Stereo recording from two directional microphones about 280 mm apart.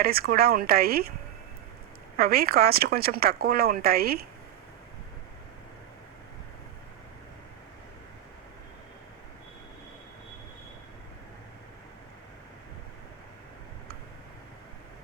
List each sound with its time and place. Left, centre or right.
0.0 s speech: right
2.1 s speech: right